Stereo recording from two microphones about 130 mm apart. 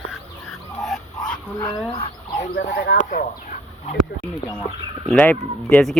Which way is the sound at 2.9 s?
90° left.